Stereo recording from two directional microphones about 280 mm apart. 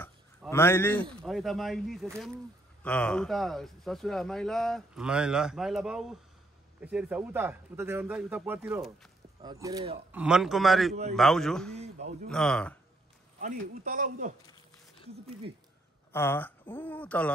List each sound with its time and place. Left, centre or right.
0.0 s a sound: centre
1.2 s a man's voice: centre
9.4 s speech: centre
10.2 s a man's voice: centre
11.8 s a man's voice: right
12.3 s a man's voice: centre
13.4 s speech: right
16.1 s speech: centre